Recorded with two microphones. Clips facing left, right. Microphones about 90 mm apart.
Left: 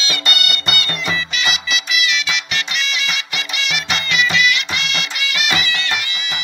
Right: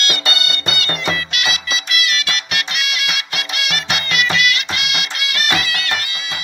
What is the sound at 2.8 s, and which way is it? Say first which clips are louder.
Music: even; 55° right (ahead or behind).